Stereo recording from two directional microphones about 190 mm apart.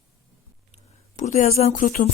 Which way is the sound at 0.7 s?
35° left (ahead or behind).